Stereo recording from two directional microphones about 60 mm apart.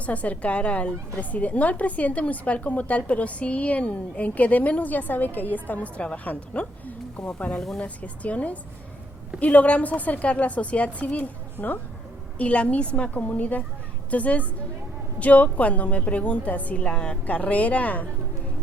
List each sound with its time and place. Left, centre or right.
0.0 s a woman's voice: left